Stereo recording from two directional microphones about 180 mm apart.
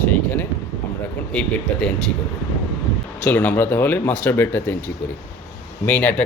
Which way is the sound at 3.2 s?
10° left (ahead or behind).